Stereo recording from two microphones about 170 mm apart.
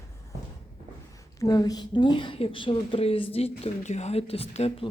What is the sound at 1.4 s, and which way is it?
A woman's voice, 20° left (ahead or behind).